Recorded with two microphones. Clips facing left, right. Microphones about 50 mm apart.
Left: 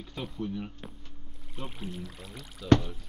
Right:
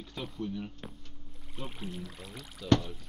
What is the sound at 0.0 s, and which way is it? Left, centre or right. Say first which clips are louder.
Speech: left 2 dB; centre.